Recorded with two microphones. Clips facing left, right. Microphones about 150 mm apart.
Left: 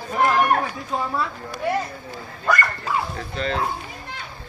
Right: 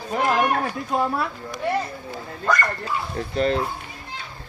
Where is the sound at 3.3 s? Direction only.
45° right (ahead or behind).